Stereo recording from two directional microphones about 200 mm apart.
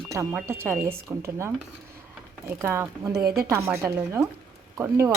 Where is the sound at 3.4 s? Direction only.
15° right (ahead or behind).